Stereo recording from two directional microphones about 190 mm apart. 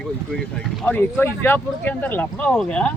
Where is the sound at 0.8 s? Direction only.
10° left (ahead or behind).